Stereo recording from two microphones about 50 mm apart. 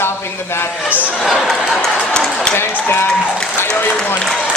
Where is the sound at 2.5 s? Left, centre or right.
Left.